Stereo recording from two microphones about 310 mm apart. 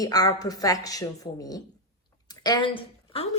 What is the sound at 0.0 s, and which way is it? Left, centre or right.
Speech, centre.